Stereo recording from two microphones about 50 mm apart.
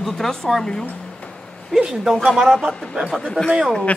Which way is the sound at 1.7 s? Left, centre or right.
Centre.